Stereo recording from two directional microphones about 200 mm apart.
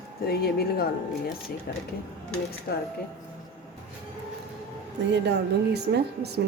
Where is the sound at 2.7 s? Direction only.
50° left (ahead or behind).